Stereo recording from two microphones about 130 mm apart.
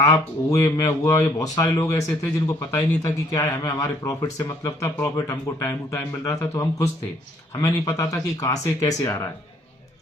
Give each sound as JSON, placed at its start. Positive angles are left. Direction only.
{"t": 0.0, "sound": "speech", "side_deg": 25}